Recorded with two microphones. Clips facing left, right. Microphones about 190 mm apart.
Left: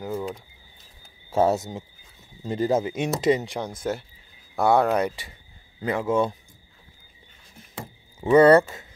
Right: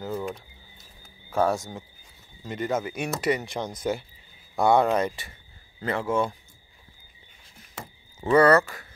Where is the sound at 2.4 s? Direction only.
30° left (ahead or behind).